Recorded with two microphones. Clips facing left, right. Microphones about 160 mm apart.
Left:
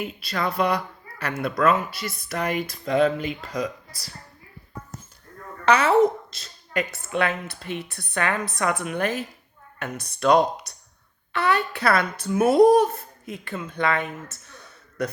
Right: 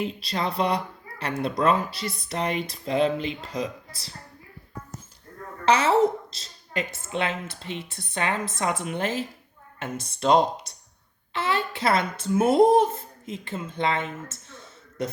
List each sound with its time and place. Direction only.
0.2 s speech: 30° right (ahead or behind)
5.6 s speech: 30° right (ahead or behind)
6.3 s a sound: 30° right (ahead or behind)
7.1 s speech: 25° right (ahead or behind)
8.4 s a woman's voice: 70° left (ahead or behind)
8.8 s speech: 25° right (ahead or behind)
14.1 s a sound: 25° right (ahead or behind)